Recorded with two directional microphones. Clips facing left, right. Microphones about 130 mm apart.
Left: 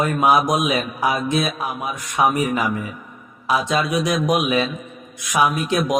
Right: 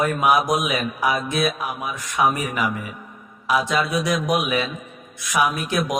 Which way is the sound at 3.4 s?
25° left (ahead or behind).